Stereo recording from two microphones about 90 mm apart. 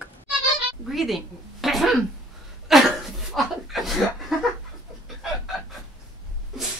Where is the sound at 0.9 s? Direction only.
Centre (ahead or behind).